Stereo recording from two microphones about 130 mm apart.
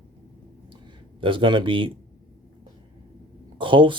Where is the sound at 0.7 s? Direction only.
40° right (ahead or behind).